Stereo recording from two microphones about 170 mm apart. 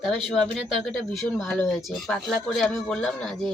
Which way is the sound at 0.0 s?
Centre (ahead or behind).